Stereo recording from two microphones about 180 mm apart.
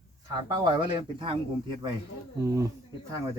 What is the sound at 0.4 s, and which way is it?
Speech, 20° right (ahead or behind).